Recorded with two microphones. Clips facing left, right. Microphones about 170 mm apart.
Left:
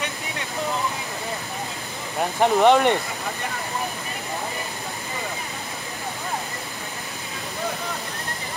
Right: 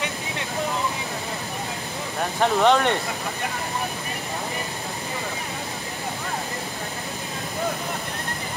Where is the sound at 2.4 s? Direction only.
15° left (ahead or behind).